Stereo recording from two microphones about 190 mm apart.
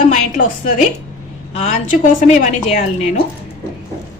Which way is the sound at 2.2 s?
40° left (ahead or behind).